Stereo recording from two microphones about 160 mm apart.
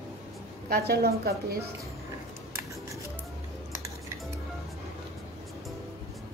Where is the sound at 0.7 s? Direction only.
75° right (ahead or behind).